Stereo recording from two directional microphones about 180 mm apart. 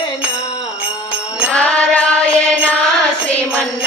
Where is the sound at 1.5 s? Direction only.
5° left (ahead or behind).